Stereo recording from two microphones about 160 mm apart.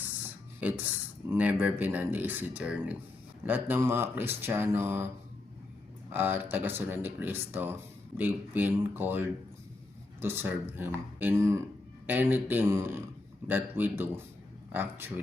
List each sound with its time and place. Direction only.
0.6 s speech: 10° right (ahead or behind)
6.1 s speech: 10° right (ahead or behind)